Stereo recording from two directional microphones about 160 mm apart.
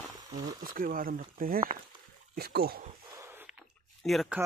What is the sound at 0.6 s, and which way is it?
Speech, 60° right (ahead or behind).